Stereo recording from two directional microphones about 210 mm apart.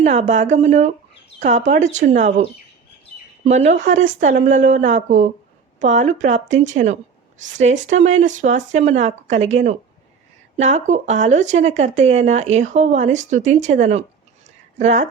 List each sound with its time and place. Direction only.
0.0 s a woman's voice: 30° right (ahead or behind)